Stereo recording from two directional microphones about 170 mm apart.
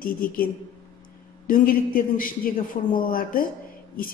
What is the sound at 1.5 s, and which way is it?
A man's voice, 55° left (ahead or behind).